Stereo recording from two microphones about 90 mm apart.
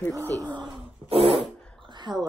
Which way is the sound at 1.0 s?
90° right.